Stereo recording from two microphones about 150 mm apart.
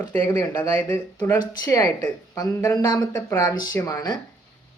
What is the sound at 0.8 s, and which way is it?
Speech, 10° left (ahead or behind).